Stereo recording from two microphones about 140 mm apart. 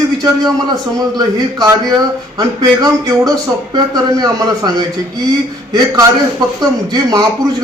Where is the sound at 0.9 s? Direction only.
25° right (ahead or behind).